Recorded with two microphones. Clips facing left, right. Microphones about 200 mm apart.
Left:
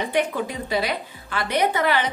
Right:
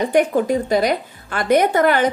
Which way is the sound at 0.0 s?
45° right (ahead or behind).